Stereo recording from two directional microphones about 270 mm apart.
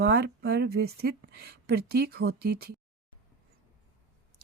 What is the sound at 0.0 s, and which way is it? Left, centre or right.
Speech, right.